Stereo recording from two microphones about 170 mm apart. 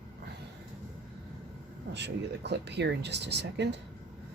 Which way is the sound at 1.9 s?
90° right.